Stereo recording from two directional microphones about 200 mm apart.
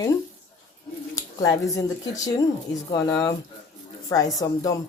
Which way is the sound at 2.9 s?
15° left (ahead or behind).